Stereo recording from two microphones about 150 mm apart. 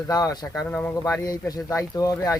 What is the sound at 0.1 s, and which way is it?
Speech, 25° left (ahead or behind).